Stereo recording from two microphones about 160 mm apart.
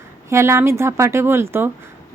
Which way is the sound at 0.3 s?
15° right (ahead or behind).